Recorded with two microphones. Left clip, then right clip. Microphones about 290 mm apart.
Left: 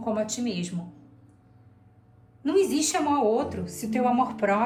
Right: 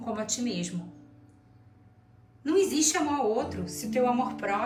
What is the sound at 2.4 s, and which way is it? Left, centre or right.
A woman's voice, centre.